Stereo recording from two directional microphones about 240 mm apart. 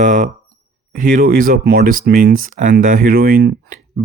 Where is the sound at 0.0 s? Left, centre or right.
Right.